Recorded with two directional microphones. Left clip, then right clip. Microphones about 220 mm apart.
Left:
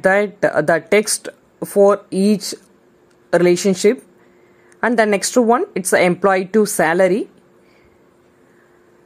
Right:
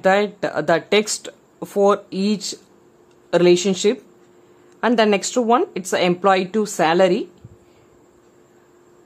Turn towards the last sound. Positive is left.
turn(degrees=15)  # may be behind; listen again after turning